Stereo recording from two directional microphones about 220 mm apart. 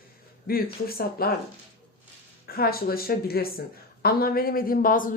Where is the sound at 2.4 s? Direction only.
45° left (ahead or behind).